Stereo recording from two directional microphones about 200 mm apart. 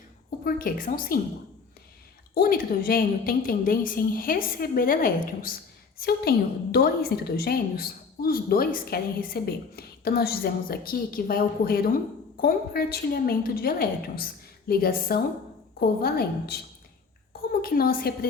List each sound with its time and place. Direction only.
0.3 s a woman's voice: 45° left (ahead or behind)
2.3 s a woman's voice: 45° left (ahead or behind)